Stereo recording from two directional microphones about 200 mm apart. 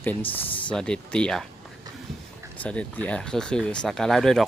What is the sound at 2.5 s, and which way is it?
Speech, 5° left (ahead or behind).